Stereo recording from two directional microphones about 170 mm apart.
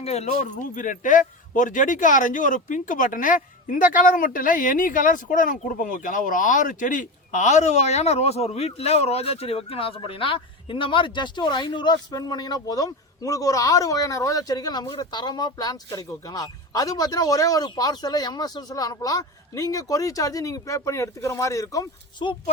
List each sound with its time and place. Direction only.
0.0 s speech: 40° left (ahead or behind); by 22.4 s 25° left (ahead or behind)